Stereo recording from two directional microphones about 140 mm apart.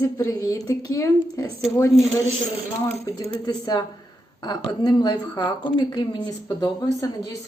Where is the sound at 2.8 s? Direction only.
20° left (ahead or behind).